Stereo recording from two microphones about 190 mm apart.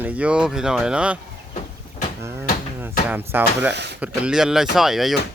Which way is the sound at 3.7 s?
65° right (ahead or behind).